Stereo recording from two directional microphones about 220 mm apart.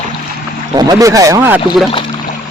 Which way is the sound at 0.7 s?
20° right (ahead or behind).